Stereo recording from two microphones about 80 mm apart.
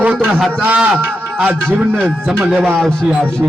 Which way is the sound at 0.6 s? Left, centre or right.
Right.